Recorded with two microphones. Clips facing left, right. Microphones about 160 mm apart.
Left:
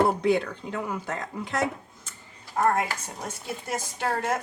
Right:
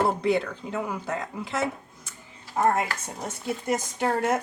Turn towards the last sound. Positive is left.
turn(degrees=-20)  # may be behind; listen again after turning